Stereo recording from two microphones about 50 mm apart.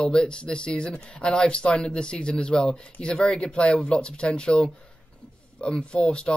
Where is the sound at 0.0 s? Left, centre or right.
Centre.